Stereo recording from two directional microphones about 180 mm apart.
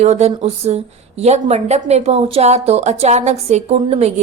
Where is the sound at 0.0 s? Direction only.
40° right (ahead or behind).